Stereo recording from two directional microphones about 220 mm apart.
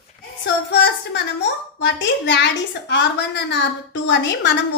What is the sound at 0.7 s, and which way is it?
A woman's voice, 55° left (ahead or behind).